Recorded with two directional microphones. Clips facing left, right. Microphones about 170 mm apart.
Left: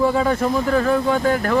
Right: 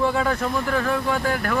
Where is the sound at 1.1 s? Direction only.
20° left (ahead or behind).